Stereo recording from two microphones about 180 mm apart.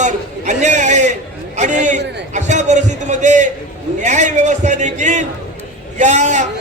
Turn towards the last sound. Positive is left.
turn(degrees=-40)  # may be behind; listen again after turning